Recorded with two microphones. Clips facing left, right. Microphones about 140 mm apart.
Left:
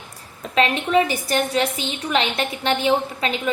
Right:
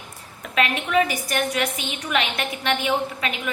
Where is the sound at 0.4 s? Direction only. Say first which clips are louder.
Left 4 dB; 30° left (ahead or behind).